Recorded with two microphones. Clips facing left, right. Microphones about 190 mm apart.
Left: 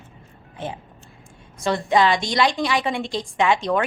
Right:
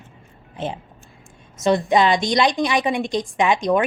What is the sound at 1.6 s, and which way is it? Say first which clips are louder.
A woman's voice: right 2 dB; 20° right (ahead or behind).